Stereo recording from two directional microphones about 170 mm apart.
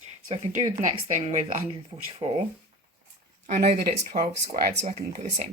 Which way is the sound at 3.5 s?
45° right (ahead or behind).